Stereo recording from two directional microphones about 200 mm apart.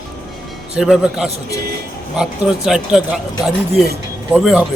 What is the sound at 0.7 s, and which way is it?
Speech, 5° right (ahead or behind).